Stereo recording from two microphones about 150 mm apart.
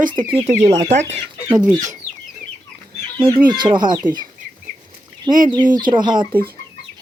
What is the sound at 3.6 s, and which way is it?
Speech, 30° right (ahead or behind).